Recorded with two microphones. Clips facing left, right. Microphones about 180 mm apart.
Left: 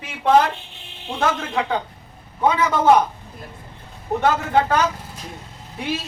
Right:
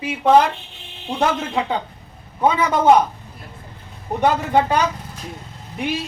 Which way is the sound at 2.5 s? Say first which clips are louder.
Right 1 dB; 15° right (ahead or behind).